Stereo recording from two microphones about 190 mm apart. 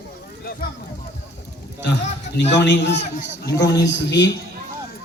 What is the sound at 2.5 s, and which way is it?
Speech, 65° left (ahead or behind).